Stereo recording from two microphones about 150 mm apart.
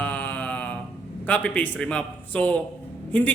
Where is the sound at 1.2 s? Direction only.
10° left (ahead or behind).